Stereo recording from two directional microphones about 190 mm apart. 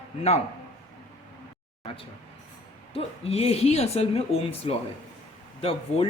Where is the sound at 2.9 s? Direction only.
30° left (ahead or behind).